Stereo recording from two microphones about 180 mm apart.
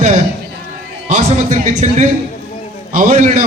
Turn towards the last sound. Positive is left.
turn(degrees=-45)  # may be behind; listen again after turning